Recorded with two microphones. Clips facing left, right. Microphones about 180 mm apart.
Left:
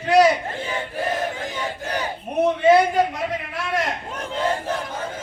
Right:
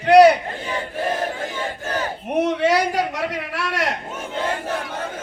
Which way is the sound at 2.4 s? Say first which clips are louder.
Left 5 dB; 75° right (ahead or behind).